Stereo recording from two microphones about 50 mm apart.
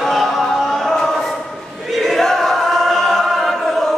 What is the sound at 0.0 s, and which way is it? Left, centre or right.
Music, centre.